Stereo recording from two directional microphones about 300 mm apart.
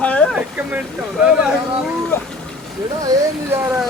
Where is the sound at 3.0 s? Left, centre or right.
Centre.